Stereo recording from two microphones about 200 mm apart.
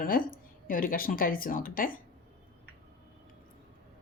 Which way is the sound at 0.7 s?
45° left (ahead or behind).